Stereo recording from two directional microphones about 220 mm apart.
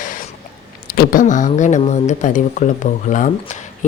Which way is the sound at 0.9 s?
35° left (ahead or behind).